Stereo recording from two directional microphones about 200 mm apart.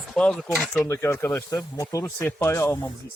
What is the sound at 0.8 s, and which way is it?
Speech, 15° left (ahead or behind).